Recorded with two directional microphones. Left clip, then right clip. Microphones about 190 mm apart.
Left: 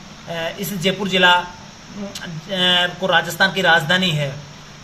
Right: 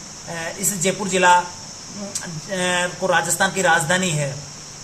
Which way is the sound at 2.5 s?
15° left (ahead or behind).